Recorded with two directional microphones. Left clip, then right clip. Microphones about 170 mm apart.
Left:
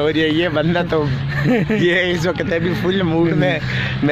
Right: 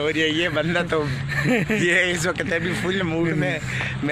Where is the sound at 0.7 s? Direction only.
20° left (ahead or behind).